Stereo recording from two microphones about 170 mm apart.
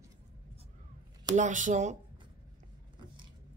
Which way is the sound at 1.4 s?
50° right (ahead or behind).